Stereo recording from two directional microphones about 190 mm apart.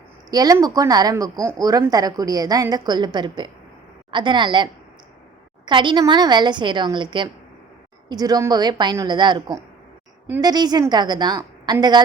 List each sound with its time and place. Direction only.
0.3 s a woman's voice: 20° right (ahead or behind)